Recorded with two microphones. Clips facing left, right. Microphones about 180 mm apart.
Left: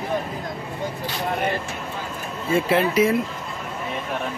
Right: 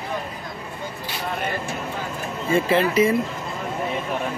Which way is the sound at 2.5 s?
Centre (ahead or behind).